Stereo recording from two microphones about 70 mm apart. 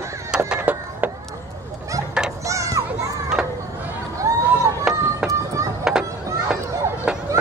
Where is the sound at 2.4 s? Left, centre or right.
Right.